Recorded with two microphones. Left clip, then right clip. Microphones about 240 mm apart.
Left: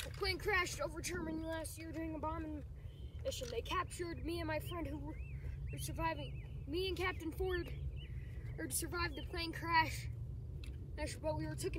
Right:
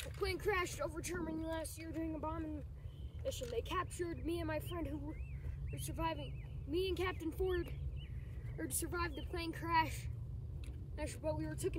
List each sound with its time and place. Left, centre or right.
0.2 s speech: centre